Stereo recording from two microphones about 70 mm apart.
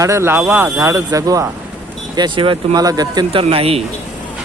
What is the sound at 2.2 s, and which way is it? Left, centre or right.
Speech, right.